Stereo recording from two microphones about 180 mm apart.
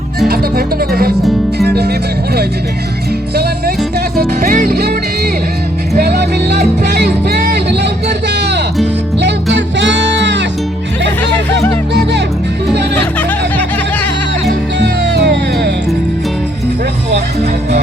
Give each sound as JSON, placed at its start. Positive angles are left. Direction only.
{"t": 0.3, "sound": "music", "side_deg": -55}
{"t": 4.2, "sound": "music", "side_deg": -45}
{"t": 13.1, "sound": "music", "side_deg": 10}
{"t": 14.8, "sound": "music", "side_deg": -75}